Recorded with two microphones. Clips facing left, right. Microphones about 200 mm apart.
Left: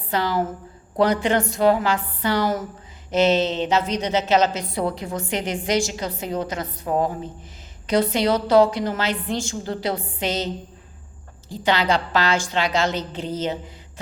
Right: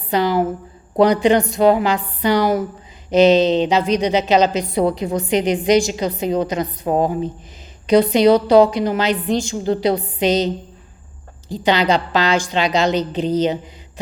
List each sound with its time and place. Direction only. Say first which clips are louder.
0.1 s a woman's voice: right 6 dB; 15° right (ahead or behind)